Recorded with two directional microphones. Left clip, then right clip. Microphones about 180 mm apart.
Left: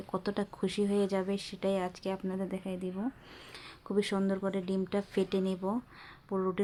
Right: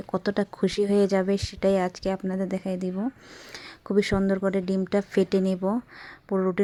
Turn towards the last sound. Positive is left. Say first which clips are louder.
# right 7 dB
turn(degrees=-30)  # may be behind; listen again after turning